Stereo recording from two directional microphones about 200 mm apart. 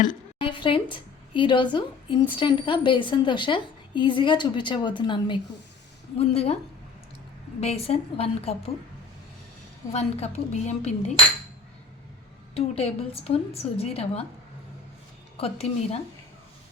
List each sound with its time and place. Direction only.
0.3 s a woman's voice: 25° left (ahead or behind)
7.6 s a woman's voice: 30° left (ahead or behind)
9.9 s a woman's voice: 30° left (ahead or behind)
12.5 s a woman's voice: 30° left (ahead or behind)
15.4 s a woman's voice: 30° left (ahead or behind)